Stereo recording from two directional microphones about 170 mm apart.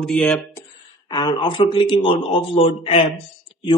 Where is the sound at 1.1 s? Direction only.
25° left (ahead or behind).